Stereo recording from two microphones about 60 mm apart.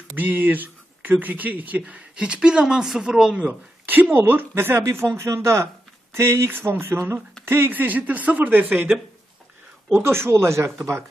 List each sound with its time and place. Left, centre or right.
0.2 s speech: right; by 3.3 s centre
4.1 s speech: right
7.7 s speech: right
9.9 s speech: right